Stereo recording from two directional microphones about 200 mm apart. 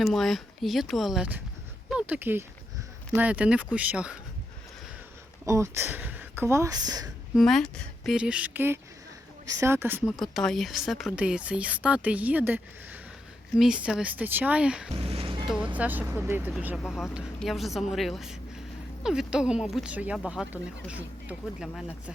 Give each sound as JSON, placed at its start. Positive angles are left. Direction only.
{"t": 0.0, "sound": "speech", "side_deg": 0}
{"t": 1.9, "sound": "a sound", "side_deg": -5}
{"t": 3.2, "sound": "speech", "side_deg": -5}
{"t": 5.5, "sound": "speech", "side_deg": -15}
{"t": 7.3, "sound": "speech", "side_deg": 0}
{"t": 10.2, "sound": "speech", "side_deg": 0}
{"t": 15.0, "sound": "music", "side_deg": -30}
{"t": 15.4, "sound": "speech", "side_deg": -5}